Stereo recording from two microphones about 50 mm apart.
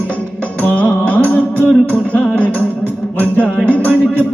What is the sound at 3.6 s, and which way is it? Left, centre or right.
Music, left.